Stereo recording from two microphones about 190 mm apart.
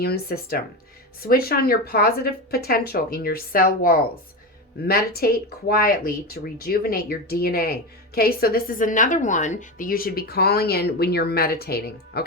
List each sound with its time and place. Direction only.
0.0 s speech: 55° left (ahead or behind)